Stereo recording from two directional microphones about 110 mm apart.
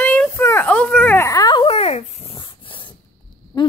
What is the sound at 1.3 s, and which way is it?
Speech, 35° left (ahead or behind).